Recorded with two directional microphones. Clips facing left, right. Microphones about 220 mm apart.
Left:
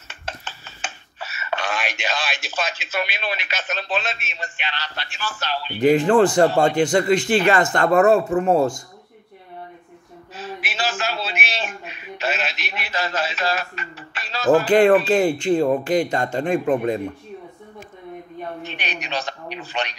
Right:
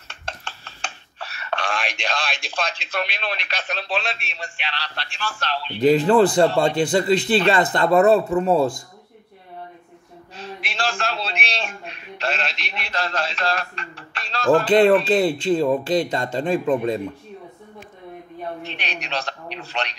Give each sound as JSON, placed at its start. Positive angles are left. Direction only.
{"t": 0.1, "sound": "speech", "side_deg": 5}
{"t": 6.4, "sound": "speech", "side_deg": -35}
{"t": 10.3, "sound": "a man's voice", "side_deg": 5}
{"t": 15.1, "sound": "speech", "side_deg": -35}
{"t": 18.6, "sound": "a man's voice", "side_deg": 0}